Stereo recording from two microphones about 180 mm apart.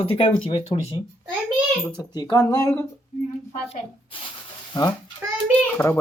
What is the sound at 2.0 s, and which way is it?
Speech, 25° left (ahead or behind).